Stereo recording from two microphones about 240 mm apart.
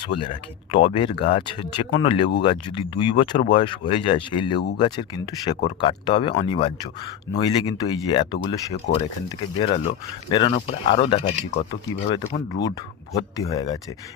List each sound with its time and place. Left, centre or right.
0.1 s speech: left
10.2 s speech: centre